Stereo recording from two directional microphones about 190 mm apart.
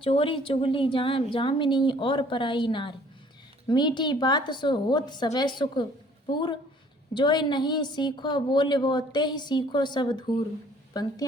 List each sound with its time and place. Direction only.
0.0 s a woman's voice: 30° left (ahead or behind)